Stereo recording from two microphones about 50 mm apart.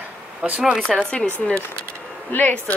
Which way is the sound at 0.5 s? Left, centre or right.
Centre.